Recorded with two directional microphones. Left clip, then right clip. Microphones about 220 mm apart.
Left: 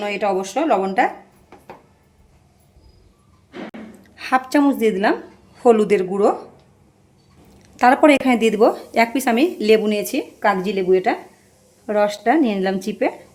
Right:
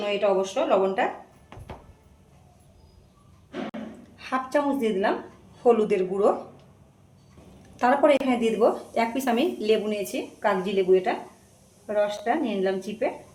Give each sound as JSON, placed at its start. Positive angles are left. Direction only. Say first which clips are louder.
{"t": 0.0, "sound": "speech", "louder": "left 2 dB", "side_deg": 55}
{"t": 4.2, "sound": "speech", "louder": "left 8 dB", "side_deg": 45}
{"t": 5.6, "sound": "speech", "louder": "left 6 dB", "side_deg": 40}
{"t": 7.8, "sound": "speech", "louder": "left 7 dB", "side_deg": 40}